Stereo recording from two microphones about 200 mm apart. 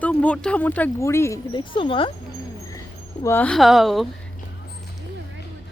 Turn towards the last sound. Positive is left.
turn(degrees=0)  # may be behind; listen again after turning